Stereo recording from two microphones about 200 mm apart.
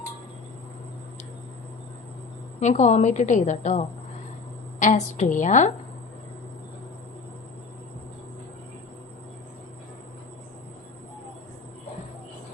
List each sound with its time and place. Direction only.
2.6 s a woman's voice: 35° left (ahead or behind)